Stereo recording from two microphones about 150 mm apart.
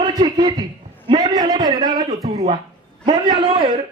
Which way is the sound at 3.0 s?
30° right (ahead or behind).